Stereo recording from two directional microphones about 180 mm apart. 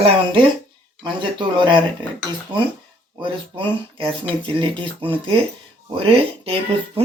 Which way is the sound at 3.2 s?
30° right (ahead or behind).